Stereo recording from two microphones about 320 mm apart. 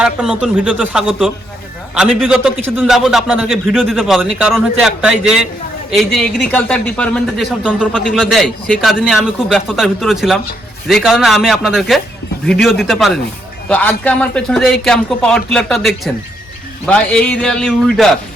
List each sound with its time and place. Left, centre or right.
0.0 s speech: centre